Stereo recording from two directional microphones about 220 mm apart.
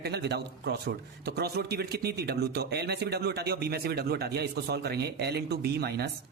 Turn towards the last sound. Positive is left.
turn(degrees=-45)  # may be behind; listen again after turning